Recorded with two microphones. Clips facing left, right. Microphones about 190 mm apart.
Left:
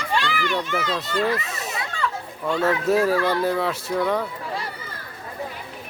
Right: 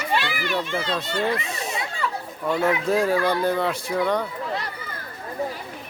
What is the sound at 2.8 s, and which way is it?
Speech, 5° left (ahead or behind).